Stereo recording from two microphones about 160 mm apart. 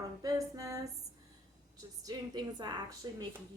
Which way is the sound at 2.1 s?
25° right (ahead or behind).